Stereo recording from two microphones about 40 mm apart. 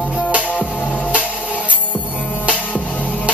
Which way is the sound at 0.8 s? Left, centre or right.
Left.